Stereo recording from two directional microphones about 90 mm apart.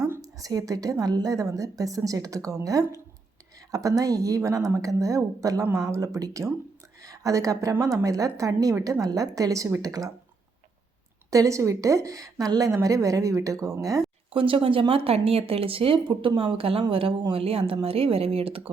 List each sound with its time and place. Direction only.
0.0 s a woman's voice: 35° right (ahead or behind)
11.3 s a woman's voice: 35° right (ahead or behind)
14.3 s speech: 80° right